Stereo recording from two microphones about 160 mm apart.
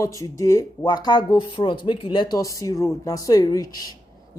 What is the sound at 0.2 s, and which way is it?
Speech, 20° left (ahead or behind).